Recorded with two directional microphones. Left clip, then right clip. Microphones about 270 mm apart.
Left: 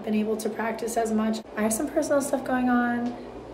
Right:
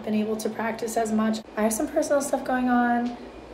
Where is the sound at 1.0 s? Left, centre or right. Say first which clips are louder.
Right 1 dB; centre.